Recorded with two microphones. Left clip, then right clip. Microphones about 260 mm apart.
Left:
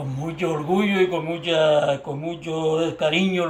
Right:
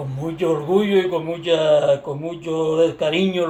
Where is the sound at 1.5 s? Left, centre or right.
Left.